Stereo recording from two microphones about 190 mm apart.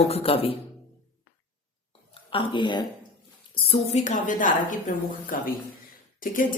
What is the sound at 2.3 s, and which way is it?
A woman's voice, 25° left (ahead or behind).